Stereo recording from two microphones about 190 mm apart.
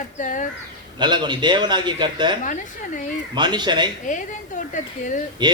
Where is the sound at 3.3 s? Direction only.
25° right (ahead or behind).